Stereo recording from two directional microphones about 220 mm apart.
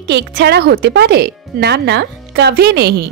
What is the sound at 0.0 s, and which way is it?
A woman's voice, 50° right (ahead or behind).